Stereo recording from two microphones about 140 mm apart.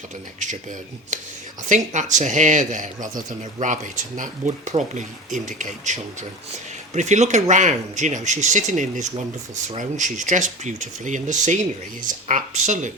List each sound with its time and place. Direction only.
1.1 s speech: 65° right (ahead or behind)